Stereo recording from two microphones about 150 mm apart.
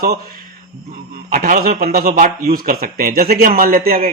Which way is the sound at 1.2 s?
70° right (ahead or behind).